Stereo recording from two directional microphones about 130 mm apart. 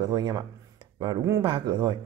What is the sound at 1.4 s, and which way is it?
Speech, 40° right (ahead or behind).